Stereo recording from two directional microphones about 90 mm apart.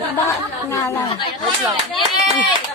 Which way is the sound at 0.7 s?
30° left (ahead or behind).